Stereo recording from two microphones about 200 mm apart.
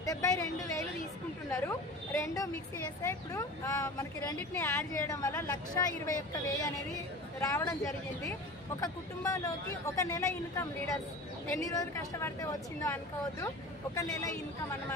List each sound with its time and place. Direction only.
0.0 s speech: 15° left (ahead or behind)
8.8 s speech: 15° left (ahead or behind)